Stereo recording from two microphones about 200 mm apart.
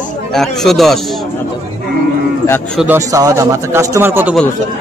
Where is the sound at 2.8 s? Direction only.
15° right (ahead or behind).